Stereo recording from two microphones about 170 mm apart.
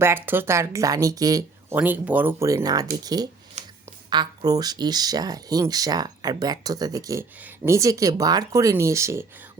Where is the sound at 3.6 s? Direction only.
40° right (ahead or behind).